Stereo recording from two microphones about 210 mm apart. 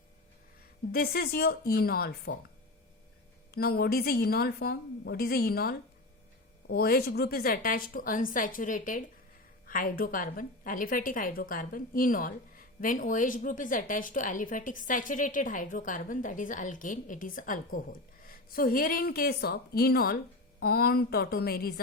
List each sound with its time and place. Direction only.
0.9 s speech: 45° left (ahead or behind)
3.5 s a woman's voice: 45° left (ahead or behind)